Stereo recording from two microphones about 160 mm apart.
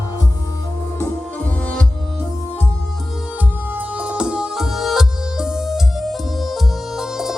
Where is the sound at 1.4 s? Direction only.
10° left (ahead or behind).